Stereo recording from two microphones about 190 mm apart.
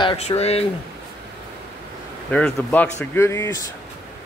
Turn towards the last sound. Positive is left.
turn(degrees=15)  # may be behind; listen again after turning